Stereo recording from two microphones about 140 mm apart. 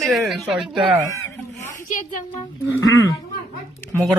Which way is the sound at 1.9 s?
70° left (ahead or behind).